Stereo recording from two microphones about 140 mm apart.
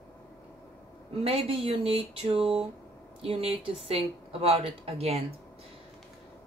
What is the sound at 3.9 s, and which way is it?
Speech, 45° right (ahead or behind).